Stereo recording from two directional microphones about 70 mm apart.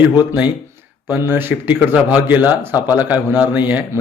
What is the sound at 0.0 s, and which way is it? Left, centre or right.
A man's voice, right.